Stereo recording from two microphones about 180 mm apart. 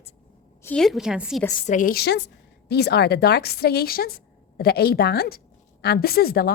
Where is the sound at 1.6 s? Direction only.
45° left (ahead or behind).